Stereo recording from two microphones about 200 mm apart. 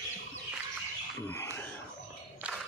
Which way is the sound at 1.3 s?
10° left (ahead or behind).